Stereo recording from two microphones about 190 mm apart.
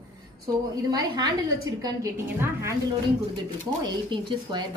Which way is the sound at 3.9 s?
25° right (ahead or behind).